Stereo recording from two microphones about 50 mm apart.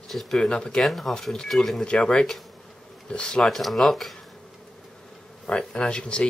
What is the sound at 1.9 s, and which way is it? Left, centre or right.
Speech, centre.